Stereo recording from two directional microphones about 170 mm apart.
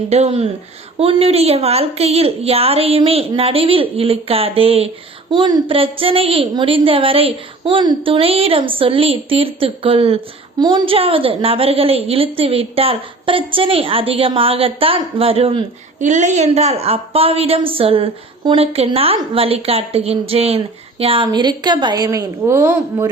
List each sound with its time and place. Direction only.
0.1 s a woman's voice: 35° right (ahead or behind)
16.0 s a woman's voice: 45° right (ahead or behind); by 23.0 s 15° right (ahead or behind)